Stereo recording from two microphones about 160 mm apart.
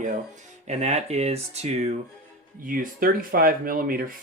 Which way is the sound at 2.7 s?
60° right (ahead or behind).